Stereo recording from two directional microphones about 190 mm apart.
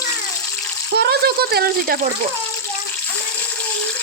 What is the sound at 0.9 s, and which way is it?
Speech, 55° right (ahead or behind).